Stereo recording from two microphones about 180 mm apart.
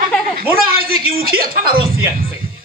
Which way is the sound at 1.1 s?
55° right (ahead or behind).